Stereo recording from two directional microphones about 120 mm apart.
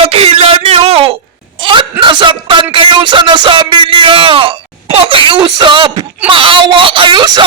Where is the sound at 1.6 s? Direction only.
45° right (ahead or behind).